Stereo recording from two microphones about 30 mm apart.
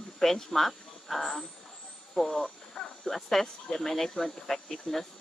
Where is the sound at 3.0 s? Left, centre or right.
Centre.